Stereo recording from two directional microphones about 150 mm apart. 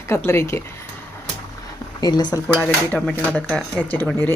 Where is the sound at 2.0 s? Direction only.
30° left (ahead or behind).